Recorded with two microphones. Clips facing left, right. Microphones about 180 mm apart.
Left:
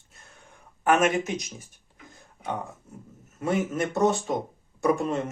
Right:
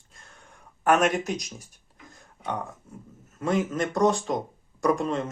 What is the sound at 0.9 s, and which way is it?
Speech, centre (ahead or behind).